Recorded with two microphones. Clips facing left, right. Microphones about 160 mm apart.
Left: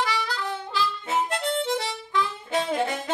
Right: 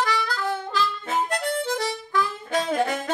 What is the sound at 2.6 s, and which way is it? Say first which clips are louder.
Saxophone: right 4 dB; 45° right (ahead or behind).